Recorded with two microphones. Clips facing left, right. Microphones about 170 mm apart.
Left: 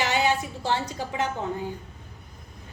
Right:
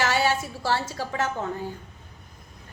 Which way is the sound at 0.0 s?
20° left (ahead or behind).